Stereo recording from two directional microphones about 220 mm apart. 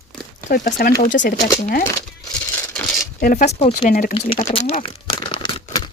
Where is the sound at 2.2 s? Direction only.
5° left (ahead or behind).